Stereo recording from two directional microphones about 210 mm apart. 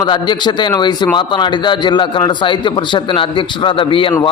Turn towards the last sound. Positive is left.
turn(degrees=25)  # may be behind; listen again after turning